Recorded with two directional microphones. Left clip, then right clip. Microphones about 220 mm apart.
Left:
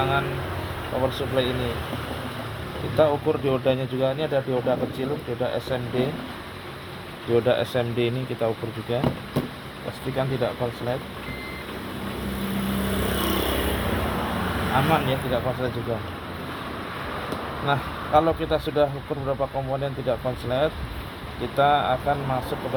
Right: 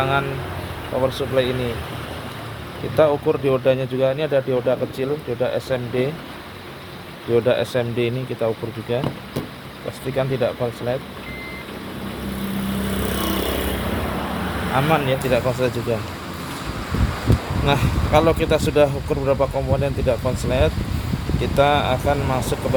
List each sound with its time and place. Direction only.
0.0 s vehicle: 40° right (ahead or behind)
1.0 s speech: 40° right (ahead or behind)
2.9 s speech: 40° right (ahead or behind)
7.3 s speech: 25° right (ahead or behind)
10.2 s speech: 50° right (ahead or behind)
13.1 s vehicle: 45° right (ahead or behind)
14.7 s speech: 45° right (ahead or behind)
17.7 s speech: 35° right (ahead or behind)